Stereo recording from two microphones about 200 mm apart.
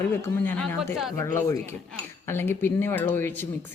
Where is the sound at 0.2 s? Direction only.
10° left (ahead or behind).